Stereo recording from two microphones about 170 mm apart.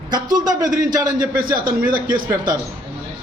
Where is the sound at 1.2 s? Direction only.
55° right (ahead or behind).